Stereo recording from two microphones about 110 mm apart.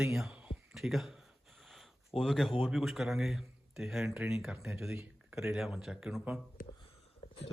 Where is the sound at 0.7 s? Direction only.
Centre (ahead or behind).